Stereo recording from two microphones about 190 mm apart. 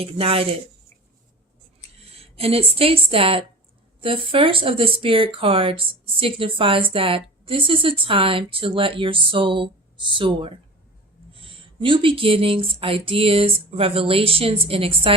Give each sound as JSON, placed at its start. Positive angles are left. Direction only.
{"t": 0.0, "sound": "speech", "side_deg": -30}
{"t": 2.1, "sound": "a woman's voice", "side_deg": -30}
{"t": 11.3, "sound": "a sound", "side_deg": -30}
{"t": 13.7, "sound": "speech", "side_deg": -30}